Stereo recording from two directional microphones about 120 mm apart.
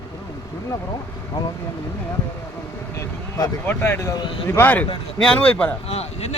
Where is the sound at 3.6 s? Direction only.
15° left (ahead or behind).